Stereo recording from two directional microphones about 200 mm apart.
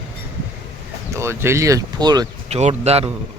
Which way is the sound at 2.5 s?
30° right (ahead or behind).